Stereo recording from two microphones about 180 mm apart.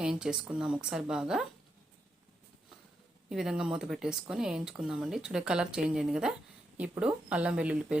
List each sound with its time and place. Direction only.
0.0 s speech: 5° right (ahead or behind)
3.2 s speech: 5° right (ahead or behind)